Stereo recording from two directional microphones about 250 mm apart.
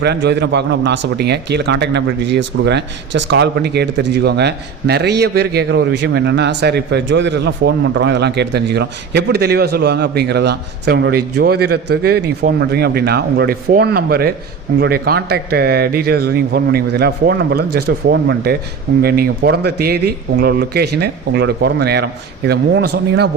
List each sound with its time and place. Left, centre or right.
0.0 s speech: right